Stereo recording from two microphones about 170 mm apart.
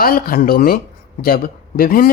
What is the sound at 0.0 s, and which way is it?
Speech, 60° left (ahead or behind).